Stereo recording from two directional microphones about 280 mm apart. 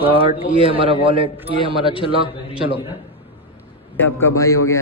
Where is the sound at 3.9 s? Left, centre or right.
Centre.